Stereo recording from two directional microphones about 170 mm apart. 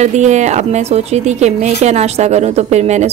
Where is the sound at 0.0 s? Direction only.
45° right (ahead or behind).